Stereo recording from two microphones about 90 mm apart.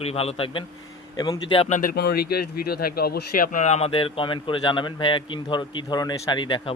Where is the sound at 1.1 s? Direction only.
50° left (ahead or behind).